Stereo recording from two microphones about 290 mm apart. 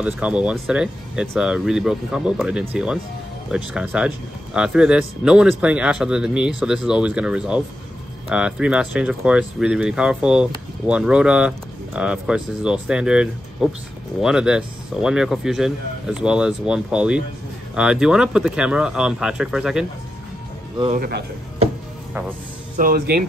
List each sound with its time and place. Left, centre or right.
0.0 s speech: centre
20.8 s speech: right
22.8 s speech: right